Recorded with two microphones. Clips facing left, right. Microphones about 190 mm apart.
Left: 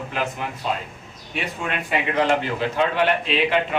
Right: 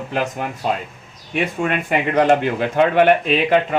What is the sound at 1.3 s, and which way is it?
Speech, 50° right (ahead or behind).